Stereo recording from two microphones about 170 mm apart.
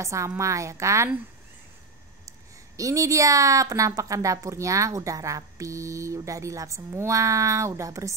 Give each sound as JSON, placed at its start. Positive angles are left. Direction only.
{"t": 0.0, "sound": "a woman's voice", "side_deg": -15}
{"t": 2.8, "sound": "a woman's voice", "side_deg": -20}